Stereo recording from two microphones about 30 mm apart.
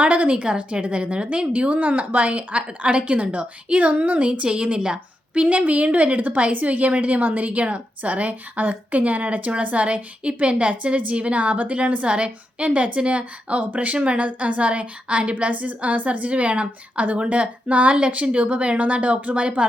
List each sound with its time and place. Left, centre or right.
0.0 s a woman's voice: right
1.7 s a woman's voice: right
4.4 s a woman's voice: right
6.5 s a woman's voice: right
7.2 s speech: right
7.4 s a woman's voice: right
11.3 s a woman's voice: right
12.0 s a woman's voice: right
15.6 s a woman's voice: right